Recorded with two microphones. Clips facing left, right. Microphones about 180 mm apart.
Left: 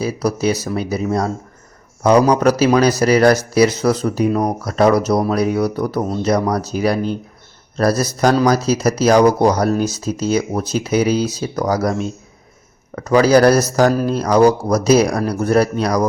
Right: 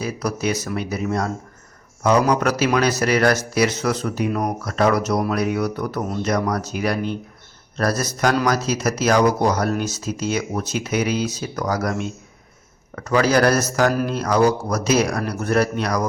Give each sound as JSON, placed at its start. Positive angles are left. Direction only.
{"t": 0.0, "sound": "speech", "side_deg": 35}